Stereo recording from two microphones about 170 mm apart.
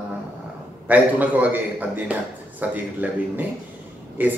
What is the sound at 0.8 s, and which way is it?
A man's voice, 10° right (ahead or behind).